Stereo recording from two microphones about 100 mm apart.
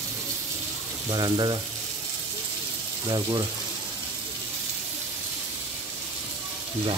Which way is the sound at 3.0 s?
40° right (ahead or behind).